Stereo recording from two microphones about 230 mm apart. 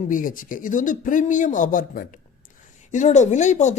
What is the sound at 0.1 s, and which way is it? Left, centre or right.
Speech, left.